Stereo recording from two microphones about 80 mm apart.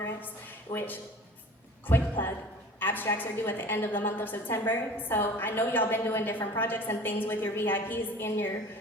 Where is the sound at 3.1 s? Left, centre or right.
Left.